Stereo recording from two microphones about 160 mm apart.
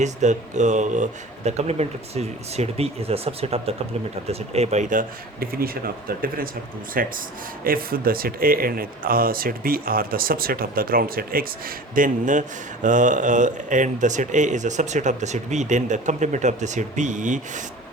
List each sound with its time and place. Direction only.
0.0 s speech: 45° right (ahead or behind)